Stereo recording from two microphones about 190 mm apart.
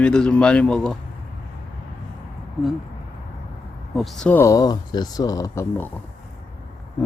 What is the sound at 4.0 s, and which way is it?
Speech, 5° left (ahead or behind).